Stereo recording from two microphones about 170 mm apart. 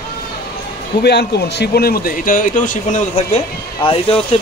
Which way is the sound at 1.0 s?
75° left (ahead or behind).